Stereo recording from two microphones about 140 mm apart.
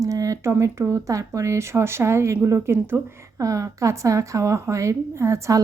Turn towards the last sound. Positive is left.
turn(degrees=-20)  # may be behind; listen again after turning